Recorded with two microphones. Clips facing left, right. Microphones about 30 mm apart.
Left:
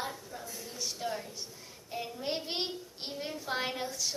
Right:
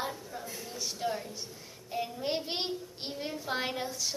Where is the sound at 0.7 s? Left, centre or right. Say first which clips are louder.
Right 2 dB; centre.